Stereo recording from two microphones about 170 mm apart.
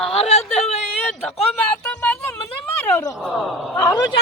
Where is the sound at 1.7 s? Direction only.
5° left (ahead or behind).